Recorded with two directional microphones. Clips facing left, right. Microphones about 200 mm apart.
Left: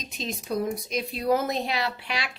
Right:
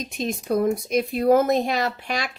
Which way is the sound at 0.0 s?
55° right (ahead or behind).